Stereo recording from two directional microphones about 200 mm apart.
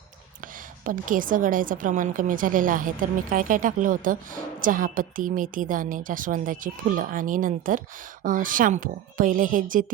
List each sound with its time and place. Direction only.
0.4 s a woman's voice: 40° right (ahead or behind)